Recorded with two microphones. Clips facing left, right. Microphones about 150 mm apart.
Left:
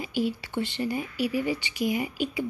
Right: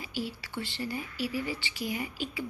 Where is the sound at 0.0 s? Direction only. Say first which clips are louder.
Left 8 dB; 20° left (ahead or behind).